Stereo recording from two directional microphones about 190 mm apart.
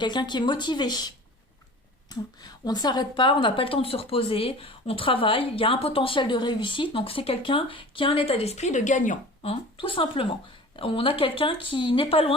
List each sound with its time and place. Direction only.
0.0 s speech: 25° left (ahead or behind)